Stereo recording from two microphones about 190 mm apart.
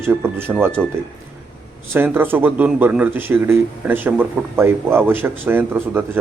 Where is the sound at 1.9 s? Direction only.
10° right (ahead or behind).